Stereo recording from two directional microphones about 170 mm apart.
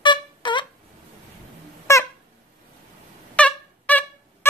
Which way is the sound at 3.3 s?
10° left (ahead or behind).